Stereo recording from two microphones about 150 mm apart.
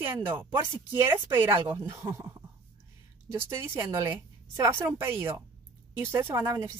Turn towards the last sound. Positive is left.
turn(degrees=-20)  # may be behind; listen again after turning